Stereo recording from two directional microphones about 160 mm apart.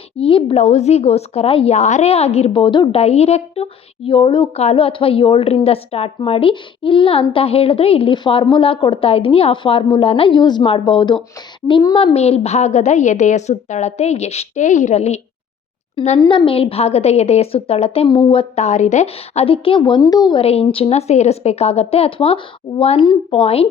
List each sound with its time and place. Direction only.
0.2 s a woman's voice: 35° left (ahead or behind)
3.0 s a woman's voice: 40° left (ahead or behind); by 11.9 s 20° left (ahead or behind)
11.9 s a woman's voice: 40° left (ahead or behind)
20.4 s a woman's voice: 40° left (ahead or behind)